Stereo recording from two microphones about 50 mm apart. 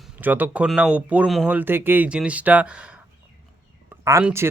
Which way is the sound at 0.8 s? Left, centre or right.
Right.